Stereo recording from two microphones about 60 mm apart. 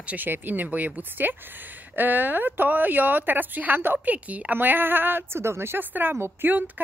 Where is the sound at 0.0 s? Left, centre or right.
Right.